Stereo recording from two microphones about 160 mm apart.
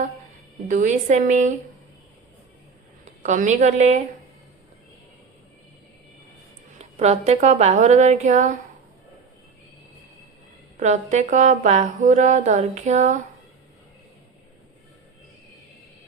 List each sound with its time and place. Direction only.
0.7 s speech: 50° right (ahead or behind)
3.0 s speech: 50° right (ahead or behind)
6.7 s speech: 45° right (ahead or behind)
10.8 s speech: 50° right (ahead or behind)